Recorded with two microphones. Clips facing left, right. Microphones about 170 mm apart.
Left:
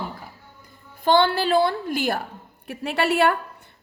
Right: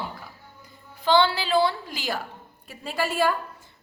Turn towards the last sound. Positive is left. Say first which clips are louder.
# left 4 dB
turn(degrees=70)  # may be behind; listen again after turning